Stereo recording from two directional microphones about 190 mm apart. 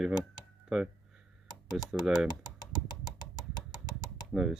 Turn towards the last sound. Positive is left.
turn(degrees=-5)  # may be behind; listen again after turning